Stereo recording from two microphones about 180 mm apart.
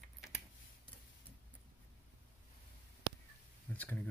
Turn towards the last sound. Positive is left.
turn(degrees=10)  # may be behind; listen again after turning